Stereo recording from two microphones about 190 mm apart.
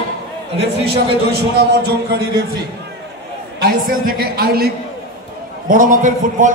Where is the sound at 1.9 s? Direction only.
55° right (ahead or behind).